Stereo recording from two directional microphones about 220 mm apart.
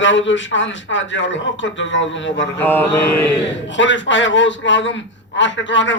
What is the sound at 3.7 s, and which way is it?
A man's voice, 55° left (ahead or behind).